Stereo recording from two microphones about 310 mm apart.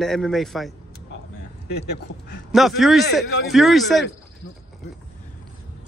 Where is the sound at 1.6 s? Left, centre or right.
Left.